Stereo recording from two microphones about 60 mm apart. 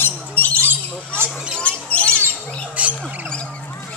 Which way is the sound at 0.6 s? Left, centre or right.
Right.